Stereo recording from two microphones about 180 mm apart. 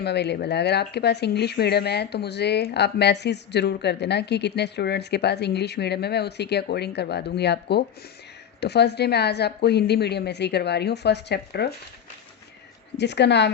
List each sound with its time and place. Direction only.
0.0 s speech: 70° left (ahead or behind)
13.0 s speech: 70° left (ahead or behind)